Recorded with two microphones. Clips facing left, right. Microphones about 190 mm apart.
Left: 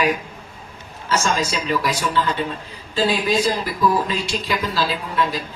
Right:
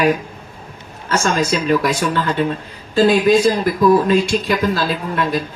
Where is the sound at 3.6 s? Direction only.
50° right (ahead or behind).